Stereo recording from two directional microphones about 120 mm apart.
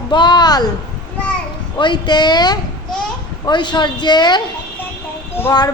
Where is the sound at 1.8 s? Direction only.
40° left (ahead or behind).